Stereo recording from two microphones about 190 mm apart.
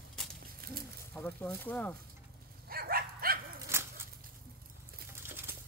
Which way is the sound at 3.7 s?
15° right (ahead or behind).